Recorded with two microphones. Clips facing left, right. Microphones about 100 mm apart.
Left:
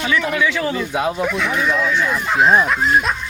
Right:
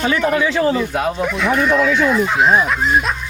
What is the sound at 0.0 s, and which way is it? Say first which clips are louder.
Speech: right 3 dB; 40° right (ahead or behind).